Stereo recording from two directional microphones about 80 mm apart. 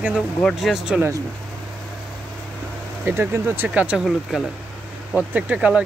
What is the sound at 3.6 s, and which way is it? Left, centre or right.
Speech, centre.